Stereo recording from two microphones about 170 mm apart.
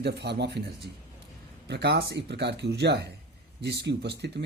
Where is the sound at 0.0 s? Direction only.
75° right (ahead or behind).